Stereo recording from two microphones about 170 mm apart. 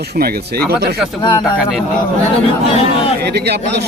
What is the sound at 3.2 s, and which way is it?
Speech, 75° right (ahead or behind).